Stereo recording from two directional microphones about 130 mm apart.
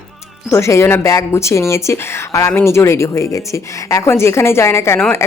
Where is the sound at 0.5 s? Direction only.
20° left (ahead or behind).